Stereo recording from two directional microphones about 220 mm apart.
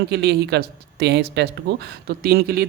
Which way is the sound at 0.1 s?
45° right (ahead or behind).